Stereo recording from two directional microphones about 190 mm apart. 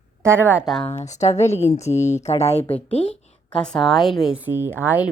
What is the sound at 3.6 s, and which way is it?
Speech, 5° left (ahead or behind).